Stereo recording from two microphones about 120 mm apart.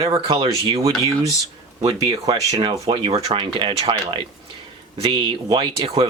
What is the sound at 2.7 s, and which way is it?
Speech, 50° right (ahead or behind).